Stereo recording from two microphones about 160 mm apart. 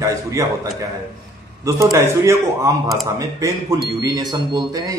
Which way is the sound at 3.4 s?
25° right (ahead or behind).